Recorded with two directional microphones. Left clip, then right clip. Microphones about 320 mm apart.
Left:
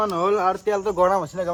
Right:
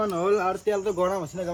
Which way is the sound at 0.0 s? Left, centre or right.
Centre.